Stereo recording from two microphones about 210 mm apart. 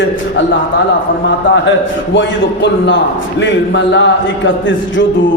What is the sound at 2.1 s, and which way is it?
A man's voice, 60° left (ahead or behind).